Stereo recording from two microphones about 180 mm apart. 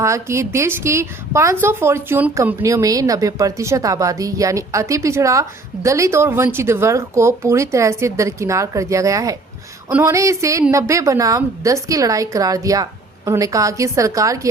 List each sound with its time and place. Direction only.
0.0 s a woman's voice: 15° right (ahead or behind)